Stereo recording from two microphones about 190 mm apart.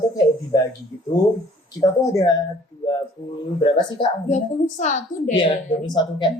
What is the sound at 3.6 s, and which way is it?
Speech, 25° left (ahead or behind).